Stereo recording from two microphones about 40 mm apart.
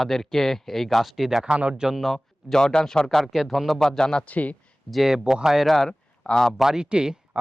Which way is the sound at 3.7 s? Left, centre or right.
Centre.